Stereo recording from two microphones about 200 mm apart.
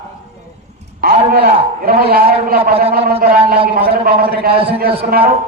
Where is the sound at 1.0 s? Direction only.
45° right (ahead or behind).